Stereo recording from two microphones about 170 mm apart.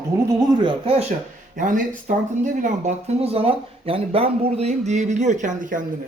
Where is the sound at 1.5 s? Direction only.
50° right (ahead or behind).